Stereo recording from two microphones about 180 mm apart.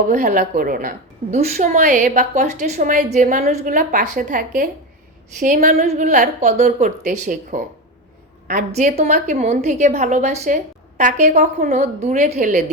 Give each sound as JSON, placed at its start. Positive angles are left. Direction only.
{"t": 0.1, "sound": "a woman's voice", "side_deg": -45}